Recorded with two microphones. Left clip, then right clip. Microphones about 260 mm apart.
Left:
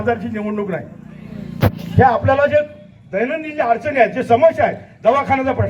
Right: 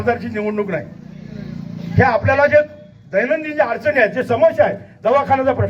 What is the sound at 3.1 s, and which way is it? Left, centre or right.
A man's voice, left.